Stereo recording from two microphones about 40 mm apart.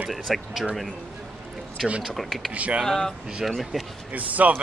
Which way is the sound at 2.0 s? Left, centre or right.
Centre.